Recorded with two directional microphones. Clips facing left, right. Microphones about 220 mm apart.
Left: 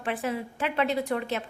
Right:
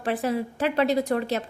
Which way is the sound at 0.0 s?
40° right (ahead or behind).